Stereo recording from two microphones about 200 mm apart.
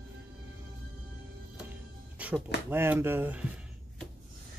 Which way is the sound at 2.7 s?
10° right (ahead or behind).